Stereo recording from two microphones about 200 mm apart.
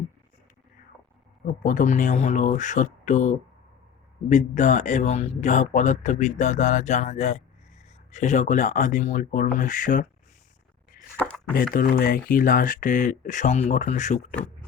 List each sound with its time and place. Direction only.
1.6 s a man's voice: 40° left (ahead or behind)
11.2 s a sound: 5° left (ahead or behind)
11.5 s a man's voice: 45° left (ahead or behind)